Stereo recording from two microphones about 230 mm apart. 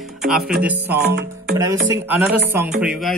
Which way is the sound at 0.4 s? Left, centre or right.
Right.